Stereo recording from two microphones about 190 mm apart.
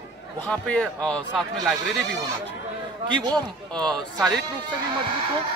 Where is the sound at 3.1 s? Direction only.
20° right (ahead or behind).